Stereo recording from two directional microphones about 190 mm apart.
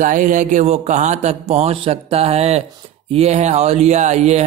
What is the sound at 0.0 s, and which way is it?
A man's voice, 45° right (ahead or behind).